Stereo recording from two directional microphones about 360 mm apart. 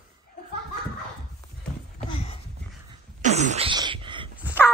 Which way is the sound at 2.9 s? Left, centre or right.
Centre.